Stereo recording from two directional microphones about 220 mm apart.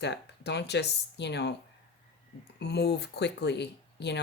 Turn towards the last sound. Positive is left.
turn(degrees=50)  # may be behind; listen again after turning